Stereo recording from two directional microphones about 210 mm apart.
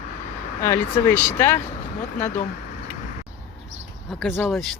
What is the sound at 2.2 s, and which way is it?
Speech, 35° left (ahead or behind).